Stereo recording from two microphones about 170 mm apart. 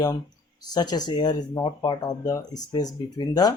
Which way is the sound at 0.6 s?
25° left (ahead or behind).